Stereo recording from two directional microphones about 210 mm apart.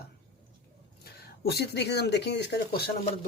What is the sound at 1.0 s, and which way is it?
Speech, 50° left (ahead or behind).